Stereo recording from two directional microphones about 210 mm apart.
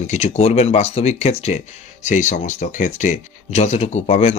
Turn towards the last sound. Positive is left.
turn(degrees=30)  # may be behind; listen again after turning